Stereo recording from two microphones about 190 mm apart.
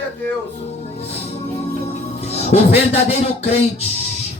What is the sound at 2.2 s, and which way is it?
Speech, 35° left (ahead or behind).